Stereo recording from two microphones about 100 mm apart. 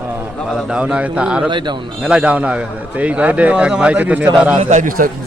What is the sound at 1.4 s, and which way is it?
Speech, 50° right (ahead or behind).